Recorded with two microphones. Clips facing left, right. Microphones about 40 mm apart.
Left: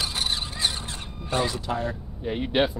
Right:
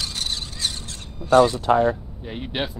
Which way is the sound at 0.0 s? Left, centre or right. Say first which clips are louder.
Left 1 dB; centre.